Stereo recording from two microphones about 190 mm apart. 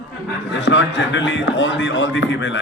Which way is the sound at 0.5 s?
75° left (ahead or behind).